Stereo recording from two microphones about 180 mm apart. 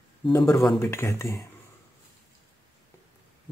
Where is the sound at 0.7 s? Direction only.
15° left (ahead or behind).